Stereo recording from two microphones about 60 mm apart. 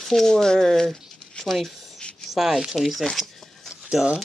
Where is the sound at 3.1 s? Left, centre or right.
Centre.